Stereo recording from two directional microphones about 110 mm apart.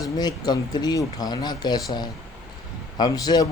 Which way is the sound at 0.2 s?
40° left (ahead or behind).